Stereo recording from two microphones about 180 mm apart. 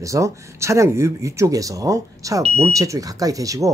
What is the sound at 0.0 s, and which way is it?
Speech, 15° right (ahead or behind).